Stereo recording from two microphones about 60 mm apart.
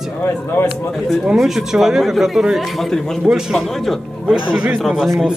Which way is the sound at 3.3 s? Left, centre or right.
Centre.